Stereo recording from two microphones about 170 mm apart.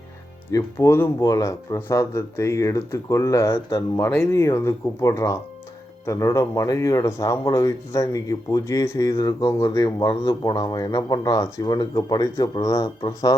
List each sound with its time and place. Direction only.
0.5 s speech: 15° left (ahead or behind)